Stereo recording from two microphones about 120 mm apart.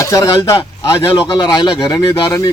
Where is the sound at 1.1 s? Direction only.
40° left (ahead or behind).